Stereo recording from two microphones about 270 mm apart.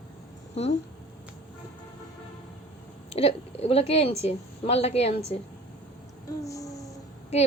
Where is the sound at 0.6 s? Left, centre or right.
Left.